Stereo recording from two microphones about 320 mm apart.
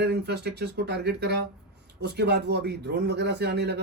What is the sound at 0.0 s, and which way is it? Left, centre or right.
A man's voice, right.